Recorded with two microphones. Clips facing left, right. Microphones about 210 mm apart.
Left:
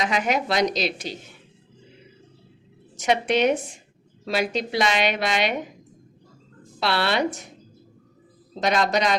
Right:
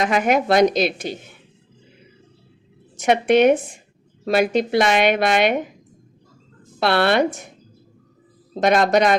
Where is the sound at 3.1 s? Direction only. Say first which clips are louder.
Right 6 dB; 55° right (ahead or behind).